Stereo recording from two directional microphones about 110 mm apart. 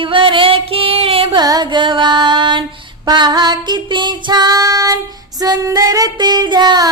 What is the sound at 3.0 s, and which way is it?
Singing, 40° right (ahead or behind).